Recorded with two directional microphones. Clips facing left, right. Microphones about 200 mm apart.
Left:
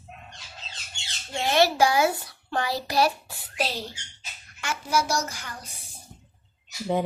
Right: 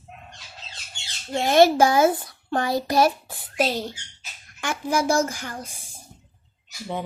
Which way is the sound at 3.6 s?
50° right (ahead or behind).